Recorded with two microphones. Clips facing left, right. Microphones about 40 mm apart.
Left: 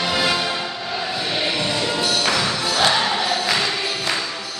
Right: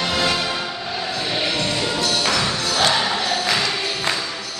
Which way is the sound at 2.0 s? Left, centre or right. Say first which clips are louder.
Even; centre.